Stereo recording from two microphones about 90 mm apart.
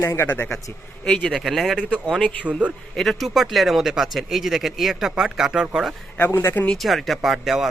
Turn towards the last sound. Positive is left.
turn(degrees=-5)  # may be behind; listen again after turning